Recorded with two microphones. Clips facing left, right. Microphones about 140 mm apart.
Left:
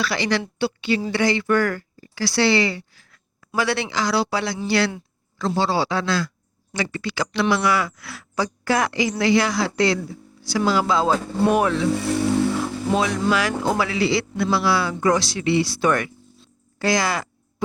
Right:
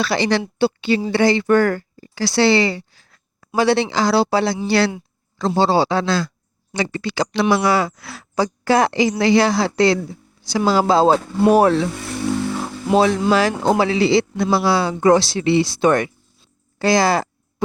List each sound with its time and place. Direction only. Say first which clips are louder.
0.0 s a man's voice: right 4 dB; 25° right (ahead or behind)
10.7 s speech: right 6 dB; 30° right (ahead or behind)
12.9 s a man's voice: right 6 dB; 30° right (ahead or behind)